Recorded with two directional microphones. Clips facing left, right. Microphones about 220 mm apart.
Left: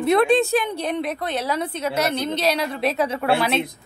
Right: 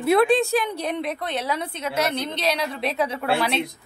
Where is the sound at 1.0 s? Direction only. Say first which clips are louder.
Left 2 dB; 40° left (ahead or behind).